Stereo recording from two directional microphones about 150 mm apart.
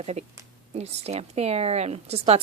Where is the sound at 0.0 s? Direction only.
45° right (ahead or behind).